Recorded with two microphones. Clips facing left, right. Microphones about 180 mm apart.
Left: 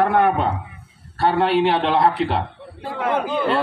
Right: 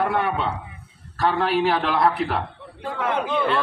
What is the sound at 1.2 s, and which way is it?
A man's voice, 30° left (ahead or behind).